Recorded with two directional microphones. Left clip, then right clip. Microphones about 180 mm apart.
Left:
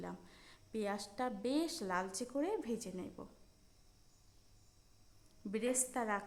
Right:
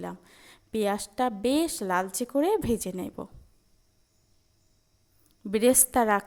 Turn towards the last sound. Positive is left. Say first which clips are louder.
# right 14 dB
turn(degrees=-45)  # may be behind; listen again after turning